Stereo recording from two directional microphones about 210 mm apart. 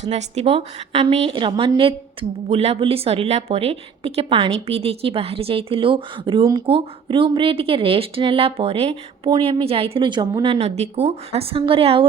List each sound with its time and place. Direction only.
0.1 s a woman's voice: 30° right (ahead or behind)